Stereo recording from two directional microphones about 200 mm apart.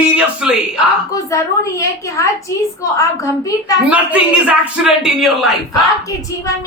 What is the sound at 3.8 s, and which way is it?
Speech, 5° right (ahead or behind).